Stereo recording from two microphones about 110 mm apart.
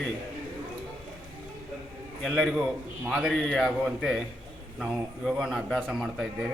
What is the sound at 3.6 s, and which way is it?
A man's voice, 5° right (ahead or behind).